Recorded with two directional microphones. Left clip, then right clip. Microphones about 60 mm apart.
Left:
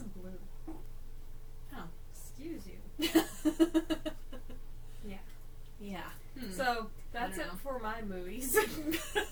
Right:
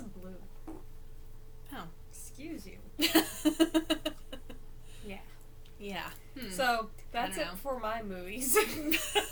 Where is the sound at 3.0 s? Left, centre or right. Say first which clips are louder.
Right 3 dB; right.